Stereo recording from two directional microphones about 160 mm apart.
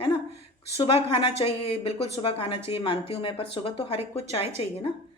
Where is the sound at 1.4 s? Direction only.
35° left (ahead or behind).